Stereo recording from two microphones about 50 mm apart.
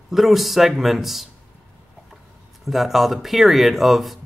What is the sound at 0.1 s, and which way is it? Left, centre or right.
Speech, centre.